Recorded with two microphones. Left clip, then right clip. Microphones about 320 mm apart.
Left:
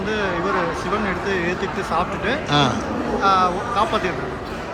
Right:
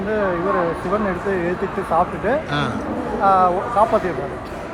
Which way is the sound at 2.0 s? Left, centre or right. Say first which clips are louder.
Right 4 dB; centre.